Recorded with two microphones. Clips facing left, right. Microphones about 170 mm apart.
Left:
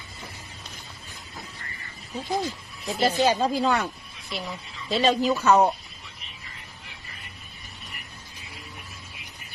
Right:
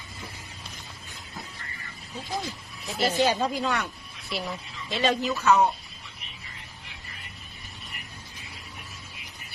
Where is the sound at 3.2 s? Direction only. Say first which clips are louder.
Left 2 dB; 30° left (ahead or behind).